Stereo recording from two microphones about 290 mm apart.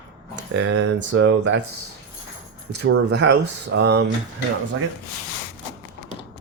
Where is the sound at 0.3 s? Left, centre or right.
Right.